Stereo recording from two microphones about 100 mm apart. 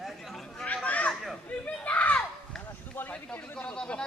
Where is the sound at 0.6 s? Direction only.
15° left (ahead or behind).